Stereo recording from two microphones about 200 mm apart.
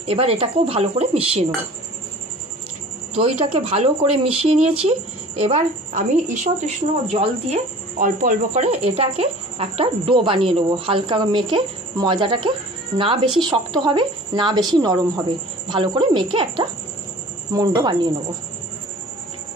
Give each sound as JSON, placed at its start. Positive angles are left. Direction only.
{"t": 0.0, "sound": "a woman's voice", "side_deg": -30}
{"t": 3.2, "sound": "a woman's voice", "side_deg": -30}